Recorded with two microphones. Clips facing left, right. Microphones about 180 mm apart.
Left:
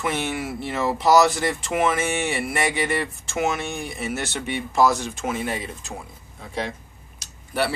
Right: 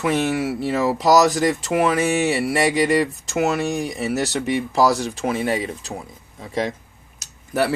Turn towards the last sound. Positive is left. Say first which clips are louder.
# right 4 dB
turn(degrees=-40)  # may be behind; listen again after turning